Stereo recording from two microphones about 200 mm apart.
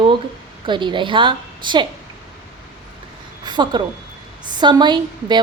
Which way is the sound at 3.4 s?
20° right (ahead or behind).